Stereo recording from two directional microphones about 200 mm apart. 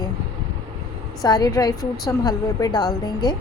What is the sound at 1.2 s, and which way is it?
A woman's voice, 20° left (ahead or behind).